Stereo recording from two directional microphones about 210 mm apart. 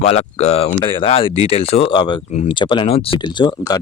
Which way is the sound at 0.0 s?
30° left (ahead or behind).